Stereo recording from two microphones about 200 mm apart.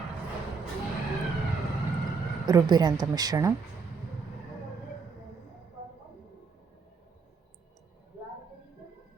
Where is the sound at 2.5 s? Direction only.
20° right (ahead or behind).